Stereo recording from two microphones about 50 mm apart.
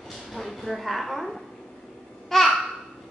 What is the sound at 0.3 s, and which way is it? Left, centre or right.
A woman's voice, centre.